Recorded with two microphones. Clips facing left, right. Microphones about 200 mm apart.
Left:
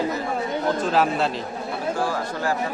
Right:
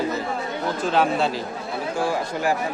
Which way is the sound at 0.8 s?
Centre (ahead or behind).